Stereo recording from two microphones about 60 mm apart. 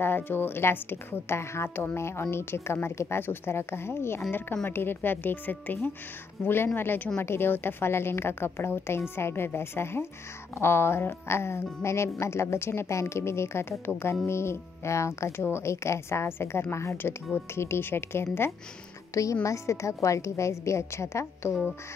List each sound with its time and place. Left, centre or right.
0.0 s a woman's voice: left
19.4 s a woman's voice: left